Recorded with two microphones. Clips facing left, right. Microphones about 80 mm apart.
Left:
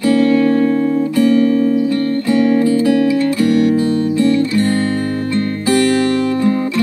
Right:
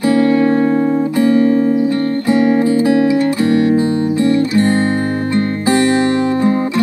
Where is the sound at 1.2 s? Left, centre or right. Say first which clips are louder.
Even; right.